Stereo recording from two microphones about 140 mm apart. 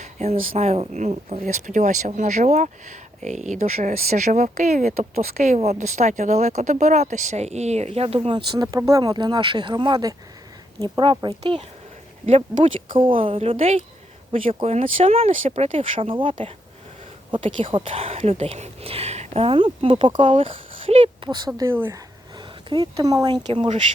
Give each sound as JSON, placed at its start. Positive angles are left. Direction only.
{"t": 0.0, "sound": "speech", "side_deg": -50}
{"t": 8.5, "sound": "speech", "side_deg": -25}
{"t": 12.2, "sound": "speech", "side_deg": -50}
{"t": 21.7, "sound": "speech", "side_deg": -15}
{"t": 22.4, "sound": "speech", "side_deg": -30}